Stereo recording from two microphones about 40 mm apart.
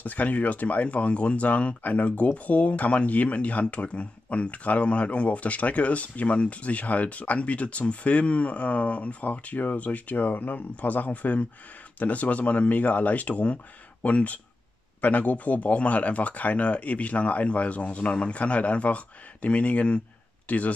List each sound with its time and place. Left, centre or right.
0.0 s speech: left